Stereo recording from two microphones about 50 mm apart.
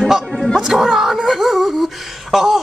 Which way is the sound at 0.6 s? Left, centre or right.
Centre.